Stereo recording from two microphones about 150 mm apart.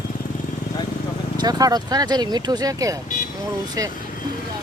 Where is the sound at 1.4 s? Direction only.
25° right (ahead or behind).